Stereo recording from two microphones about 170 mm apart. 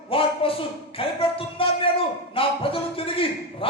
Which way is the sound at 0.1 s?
30° left (ahead or behind).